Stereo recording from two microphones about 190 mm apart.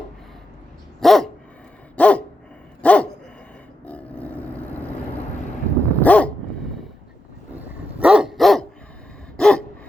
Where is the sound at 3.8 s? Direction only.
5° left (ahead or behind).